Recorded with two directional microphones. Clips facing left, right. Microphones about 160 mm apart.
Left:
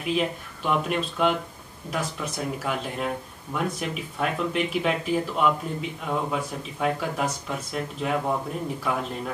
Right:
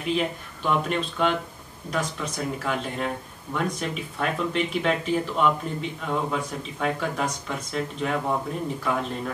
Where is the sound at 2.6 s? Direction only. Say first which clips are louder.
Right 1 dB; 5° left (ahead or behind).